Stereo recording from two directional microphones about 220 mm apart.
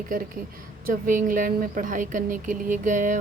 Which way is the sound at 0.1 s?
40° right (ahead or behind).